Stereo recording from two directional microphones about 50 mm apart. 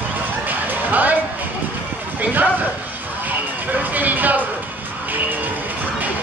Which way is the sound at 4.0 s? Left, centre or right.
Right.